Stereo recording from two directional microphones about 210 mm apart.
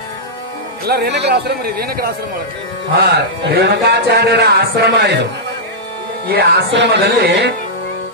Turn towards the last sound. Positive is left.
turn(degrees=-50)  # may be behind; listen again after turning